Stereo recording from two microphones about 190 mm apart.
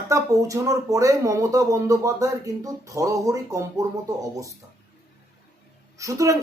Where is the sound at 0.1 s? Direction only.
15° right (ahead or behind).